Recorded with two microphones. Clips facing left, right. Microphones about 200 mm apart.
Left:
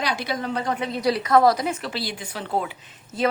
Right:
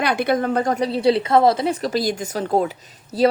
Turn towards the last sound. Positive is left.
turn(degrees=-40)  # may be behind; listen again after turning